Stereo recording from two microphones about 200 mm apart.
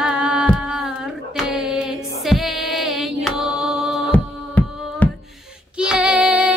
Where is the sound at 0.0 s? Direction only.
5° right (ahead or behind).